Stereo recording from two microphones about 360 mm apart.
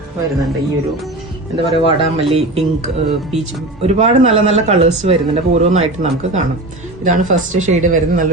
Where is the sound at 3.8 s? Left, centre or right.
Centre.